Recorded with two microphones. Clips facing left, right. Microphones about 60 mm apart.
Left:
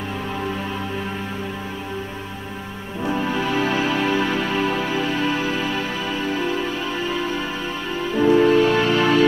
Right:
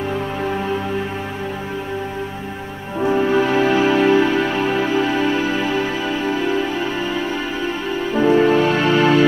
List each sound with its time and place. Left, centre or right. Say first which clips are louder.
3.2 s music: right 6 dB; right
8.1 s music: right 1 dB; right